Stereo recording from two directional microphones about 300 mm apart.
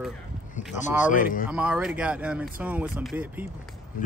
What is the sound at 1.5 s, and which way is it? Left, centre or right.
Speech, centre.